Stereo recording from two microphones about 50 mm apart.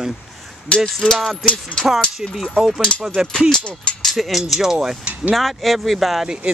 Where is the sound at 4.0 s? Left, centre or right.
Centre.